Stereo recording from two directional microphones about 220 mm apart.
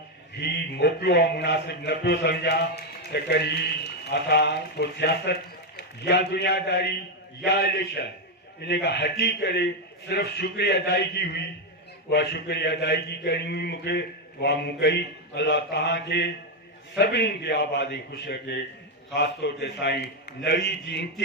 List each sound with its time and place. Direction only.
0.4 s a man's voice: 50° left (ahead or behind)